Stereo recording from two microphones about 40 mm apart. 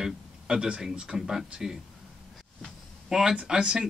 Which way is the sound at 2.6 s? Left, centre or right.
Centre.